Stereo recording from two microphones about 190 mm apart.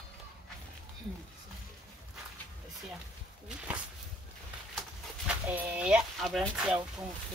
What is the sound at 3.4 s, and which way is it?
Speech, 5° right (ahead or behind).